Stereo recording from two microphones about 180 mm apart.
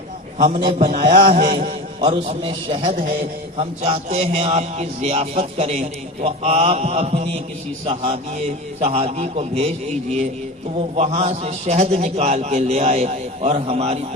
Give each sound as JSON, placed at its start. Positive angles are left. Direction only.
{"t": 0.3, "sound": "a man's voice", "side_deg": -40}